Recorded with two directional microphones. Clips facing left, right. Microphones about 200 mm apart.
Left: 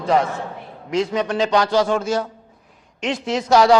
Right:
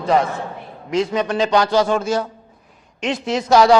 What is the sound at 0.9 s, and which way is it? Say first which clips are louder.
A man's voice: right 1 dB; 10° right (ahead or behind).